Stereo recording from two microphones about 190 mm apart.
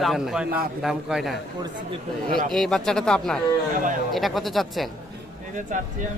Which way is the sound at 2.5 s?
Centre (ahead or behind).